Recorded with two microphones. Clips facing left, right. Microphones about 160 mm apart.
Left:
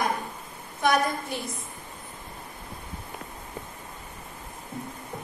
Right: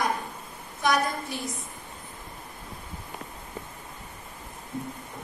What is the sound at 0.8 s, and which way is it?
Speech, 55° left (ahead or behind).